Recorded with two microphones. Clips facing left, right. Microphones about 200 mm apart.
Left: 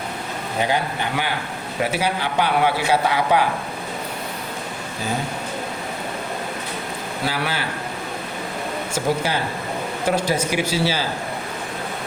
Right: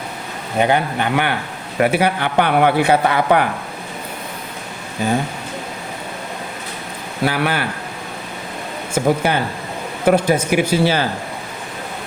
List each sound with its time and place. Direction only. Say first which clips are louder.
0.6 s a man's voice: right 6 dB; 60° right (ahead or behind)
7.3 s a man's voice: right 6 dB; 55° right (ahead or behind)
9.0 s a man's voice: right 6 dB; 55° right (ahead or behind)